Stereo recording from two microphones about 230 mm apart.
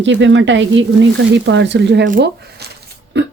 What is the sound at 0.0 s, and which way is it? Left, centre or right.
Speech, right.